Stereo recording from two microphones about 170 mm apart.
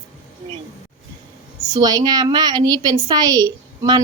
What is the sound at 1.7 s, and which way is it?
A woman's voice, 25° right (ahead or behind).